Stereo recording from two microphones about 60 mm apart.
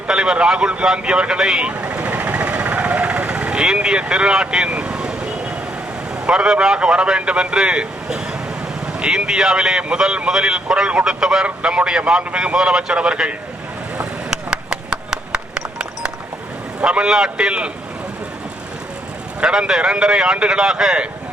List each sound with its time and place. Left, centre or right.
0.1 s vehicle: centre
6.2 s a man's voice: centre
14.0 s a sound: centre
16.8 s a man's voice: centre
19.4 s a man's voice: centre